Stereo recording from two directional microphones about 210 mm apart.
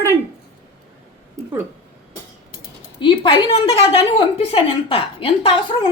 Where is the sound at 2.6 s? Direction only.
20° left (ahead or behind).